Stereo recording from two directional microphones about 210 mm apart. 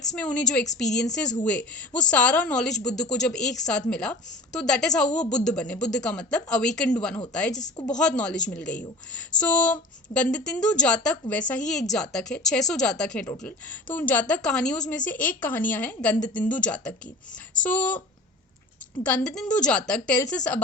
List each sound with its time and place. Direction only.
0.0 s a woman's voice: 5° left (ahead or behind)
19.0 s speech: 5° left (ahead or behind)